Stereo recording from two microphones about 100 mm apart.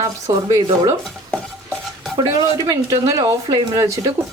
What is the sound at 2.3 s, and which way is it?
A woman's voice, 35° right (ahead or behind).